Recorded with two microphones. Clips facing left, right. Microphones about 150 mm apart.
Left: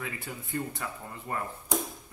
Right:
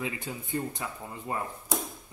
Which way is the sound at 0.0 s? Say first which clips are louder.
Right 3 dB; 20° right (ahead or behind).